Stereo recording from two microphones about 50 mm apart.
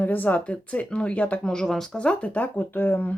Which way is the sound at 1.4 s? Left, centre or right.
Centre.